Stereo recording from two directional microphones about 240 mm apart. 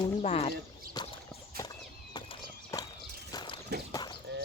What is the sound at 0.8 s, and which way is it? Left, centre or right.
Whip, right.